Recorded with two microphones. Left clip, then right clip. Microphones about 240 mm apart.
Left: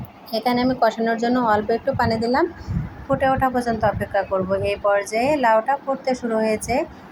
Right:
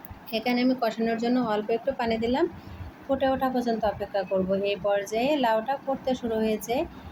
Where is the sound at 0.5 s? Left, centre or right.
Centre.